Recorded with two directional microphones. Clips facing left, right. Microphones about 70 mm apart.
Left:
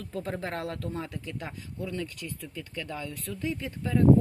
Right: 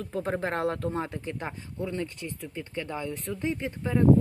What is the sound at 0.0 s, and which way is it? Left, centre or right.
Speech, right.